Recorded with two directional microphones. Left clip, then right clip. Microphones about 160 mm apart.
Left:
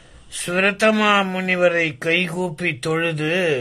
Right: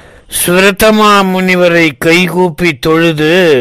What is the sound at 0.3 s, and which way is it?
A man's voice, 65° right (ahead or behind).